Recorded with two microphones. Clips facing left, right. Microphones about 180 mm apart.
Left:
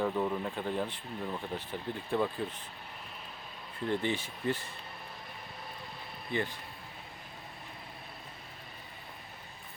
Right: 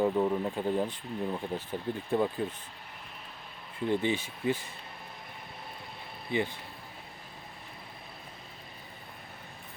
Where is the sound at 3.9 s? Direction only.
15° right (ahead or behind).